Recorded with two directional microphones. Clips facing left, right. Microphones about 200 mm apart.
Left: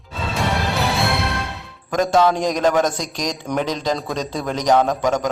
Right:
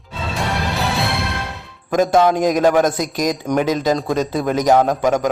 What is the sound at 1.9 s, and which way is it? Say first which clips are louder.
A man's voice: right 2 dB; 10° right (ahead or behind).